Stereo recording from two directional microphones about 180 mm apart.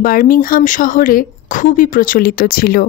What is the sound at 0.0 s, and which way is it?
Speech, 50° left (ahead or behind).